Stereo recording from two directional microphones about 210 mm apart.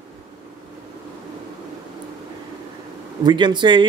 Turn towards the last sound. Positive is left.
turn(degrees=-20)  # may be behind; listen again after turning